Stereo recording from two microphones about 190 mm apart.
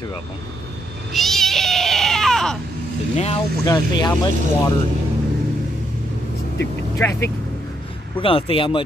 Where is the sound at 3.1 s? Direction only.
35° left (ahead or behind).